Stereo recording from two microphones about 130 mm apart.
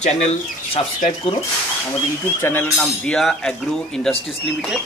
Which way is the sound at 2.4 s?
15° left (ahead or behind).